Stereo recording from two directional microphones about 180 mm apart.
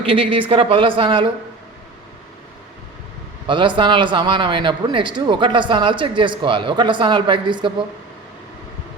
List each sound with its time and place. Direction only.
0.0 s a man's voice: 30° right (ahead or behind)
3.4 s a man's voice: 25° right (ahead or behind)